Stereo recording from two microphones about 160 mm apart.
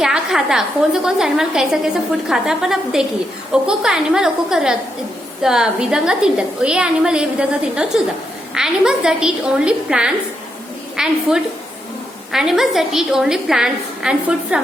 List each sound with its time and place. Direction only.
0.0 s a woman's voice: 5° right (ahead or behind)